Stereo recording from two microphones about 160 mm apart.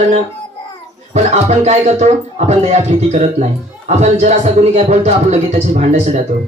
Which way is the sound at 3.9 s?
45° right (ahead or behind).